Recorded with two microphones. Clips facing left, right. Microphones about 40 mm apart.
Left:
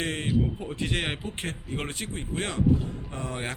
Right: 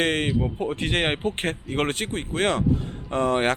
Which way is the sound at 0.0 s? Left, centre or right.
Right.